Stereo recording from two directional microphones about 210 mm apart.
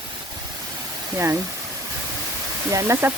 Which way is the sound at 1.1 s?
10° right (ahead or behind).